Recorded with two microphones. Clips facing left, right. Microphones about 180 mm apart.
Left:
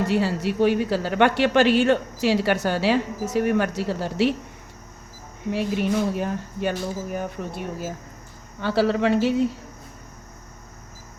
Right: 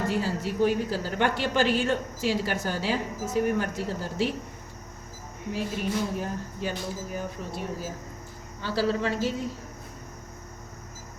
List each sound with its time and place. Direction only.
0.1 s speech: 70° left (ahead or behind)
5.5 s speech: 70° left (ahead or behind)